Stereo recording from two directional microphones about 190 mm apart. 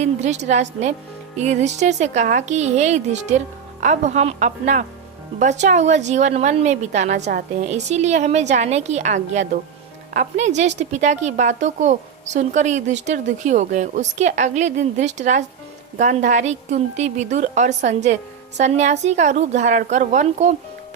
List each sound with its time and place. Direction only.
0.0 s a woman's voice: 35° right (ahead or behind)